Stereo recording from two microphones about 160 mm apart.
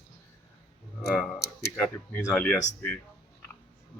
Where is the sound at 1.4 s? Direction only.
90° left.